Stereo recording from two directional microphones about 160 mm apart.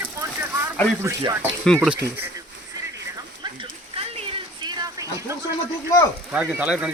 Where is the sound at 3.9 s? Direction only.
30° right (ahead or behind).